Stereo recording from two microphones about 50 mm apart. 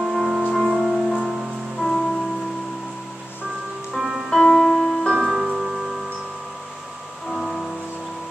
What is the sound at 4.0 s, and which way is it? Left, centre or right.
Music, centre.